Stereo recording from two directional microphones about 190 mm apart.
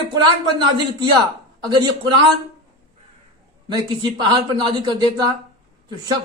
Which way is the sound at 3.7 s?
20° right (ahead or behind).